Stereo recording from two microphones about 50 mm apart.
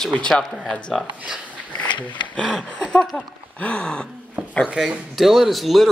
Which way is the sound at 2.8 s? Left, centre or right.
Left.